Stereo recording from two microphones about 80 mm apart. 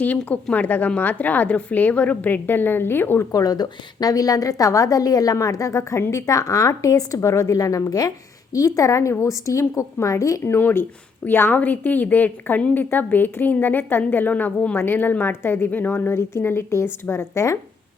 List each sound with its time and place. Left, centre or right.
0.0 s a woman's voice: left
3.3 s a woman's voice: left
10.4 s a woman's voice: left